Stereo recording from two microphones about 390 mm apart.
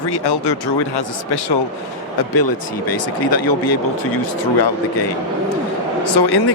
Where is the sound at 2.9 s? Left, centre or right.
Left.